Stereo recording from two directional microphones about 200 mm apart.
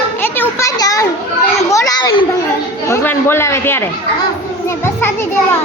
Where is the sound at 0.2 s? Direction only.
15° left (ahead or behind).